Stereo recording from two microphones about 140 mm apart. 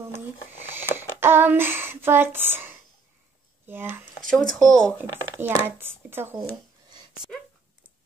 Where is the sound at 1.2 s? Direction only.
15° right (ahead or behind).